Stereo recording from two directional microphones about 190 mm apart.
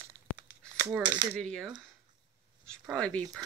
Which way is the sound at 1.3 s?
5° left (ahead or behind).